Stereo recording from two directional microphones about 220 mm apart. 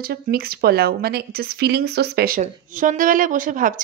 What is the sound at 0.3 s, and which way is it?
A woman's voice, 45° right (ahead or behind).